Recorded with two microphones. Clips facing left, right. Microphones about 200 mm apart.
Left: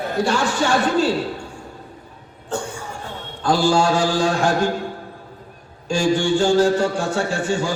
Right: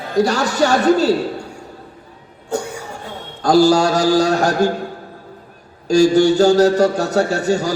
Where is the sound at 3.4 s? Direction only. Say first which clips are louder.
Right 5 dB; 40° right (ahead or behind).